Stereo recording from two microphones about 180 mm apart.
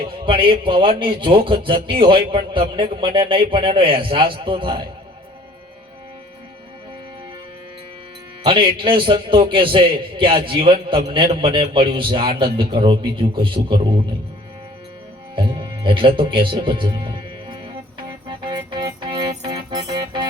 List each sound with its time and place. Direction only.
0.0 s a man's voice: 30° right (ahead or behind)
8.4 s a man's voice: 30° right (ahead or behind)
15.4 s speech: 25° right (ahead or behind)
18.3 s music: 25° right (ahead or behind)